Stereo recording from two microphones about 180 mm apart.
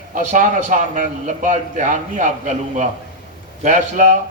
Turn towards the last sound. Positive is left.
turn(degrees=-45)  # may be behind; listen again after turning